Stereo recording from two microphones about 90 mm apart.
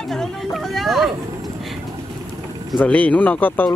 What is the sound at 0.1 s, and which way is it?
Chatter, 5° left (ahead or behind).